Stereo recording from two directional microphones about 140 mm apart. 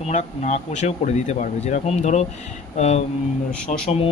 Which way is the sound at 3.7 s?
60° left (ahead or behind).